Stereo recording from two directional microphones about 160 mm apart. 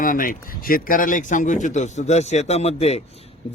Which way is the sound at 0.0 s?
60° left (ahead or behind).